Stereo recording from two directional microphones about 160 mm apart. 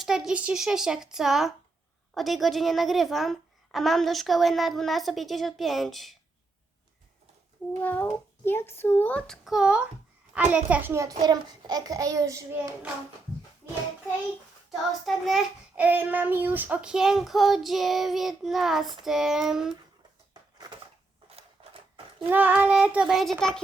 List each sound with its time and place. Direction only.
0.0 s a woman's voice: 5° right (ahead or behind)
7.8 s a child's voice: 10° left (ahead or behind); by 12.7 s 20° right (ahead or behind)
14.7 s a woman's voice: centre (ahead or behind)
15.7 s a woman's voice: 10° right (ahead or behind)
21.2 s a sound: 35° right (ahead or behind)
22.3 s child singing: 10° right (ahead or behind)